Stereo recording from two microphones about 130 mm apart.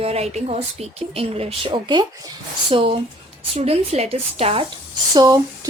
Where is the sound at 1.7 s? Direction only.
35° right (ahead or behind).